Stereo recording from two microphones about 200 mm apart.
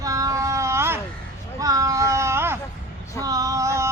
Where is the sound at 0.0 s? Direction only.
15° right (ahead or behind).